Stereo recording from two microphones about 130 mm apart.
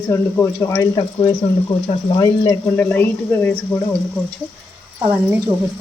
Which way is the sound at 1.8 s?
30° left (ahead or behind).